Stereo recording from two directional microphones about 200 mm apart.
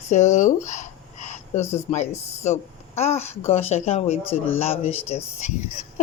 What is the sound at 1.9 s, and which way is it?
A woman's voice, 35° left (ahead or behind).